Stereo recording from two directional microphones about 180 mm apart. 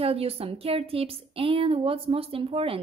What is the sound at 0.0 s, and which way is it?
A woman's voice, 30° right (ahead or behind).